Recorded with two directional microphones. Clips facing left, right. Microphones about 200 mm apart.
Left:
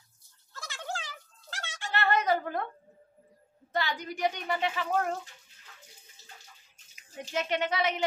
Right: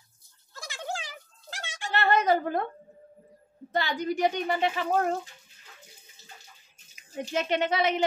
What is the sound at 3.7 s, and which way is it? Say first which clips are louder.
A woman's voice: right 5 dB; 25° right (ahead or behind).